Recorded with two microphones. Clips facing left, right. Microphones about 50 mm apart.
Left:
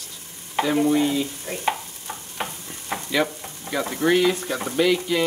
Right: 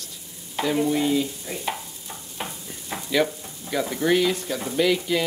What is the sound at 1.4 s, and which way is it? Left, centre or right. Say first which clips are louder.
Stir: left 2 dB; left.